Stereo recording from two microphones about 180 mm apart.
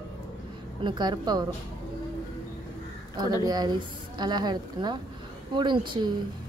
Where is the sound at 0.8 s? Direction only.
25° right (ahead or behind).